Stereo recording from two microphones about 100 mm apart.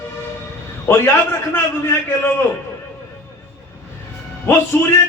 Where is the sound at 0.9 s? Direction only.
25° left (ahead or behind).